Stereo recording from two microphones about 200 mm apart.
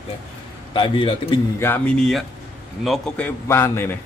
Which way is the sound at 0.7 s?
25° left (ahead or behind).